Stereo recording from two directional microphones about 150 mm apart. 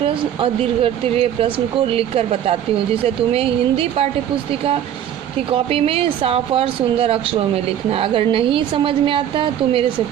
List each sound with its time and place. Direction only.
0.0 s speech: 35° right (ahead or behind)
5.5 s speech: 40° right (ahead or behind)